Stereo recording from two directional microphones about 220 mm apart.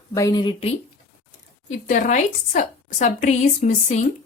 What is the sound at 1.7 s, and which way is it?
A woman's voice, 35° left (ahead or behind).